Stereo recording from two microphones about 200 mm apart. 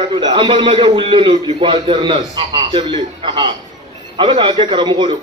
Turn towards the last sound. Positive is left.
turn(degrees=-25)  # may be behind; listen again after turning